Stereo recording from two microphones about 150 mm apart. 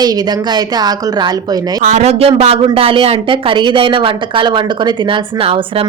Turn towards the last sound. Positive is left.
turn(degrees=-40)  # may be behind; listen again after turning